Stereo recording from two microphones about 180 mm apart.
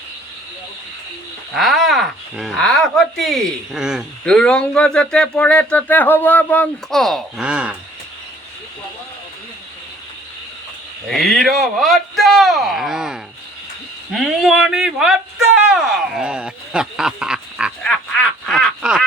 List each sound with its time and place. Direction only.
1.5 s speech: centre (ahead or behind)
11.1 s speech: centre (ahead or behind)